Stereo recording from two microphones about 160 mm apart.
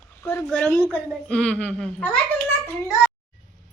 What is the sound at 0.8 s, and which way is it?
Speech, 5° right (ahead or behind).